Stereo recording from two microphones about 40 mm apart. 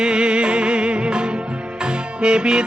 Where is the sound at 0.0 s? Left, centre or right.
Right.